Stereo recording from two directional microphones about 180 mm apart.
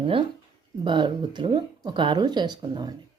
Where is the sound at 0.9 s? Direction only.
25° right (ahead or behind).